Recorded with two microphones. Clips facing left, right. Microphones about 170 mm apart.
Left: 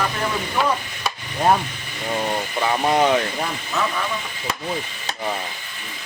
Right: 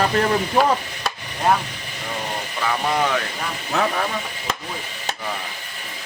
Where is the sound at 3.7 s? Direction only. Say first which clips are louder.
Right 3 dB; 60° right (ahead or behind).